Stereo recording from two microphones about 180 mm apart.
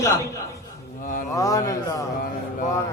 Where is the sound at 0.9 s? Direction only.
45° left (ahead or behind).